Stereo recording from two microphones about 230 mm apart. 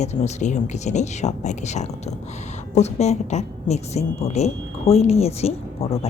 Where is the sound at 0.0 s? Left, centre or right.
Left.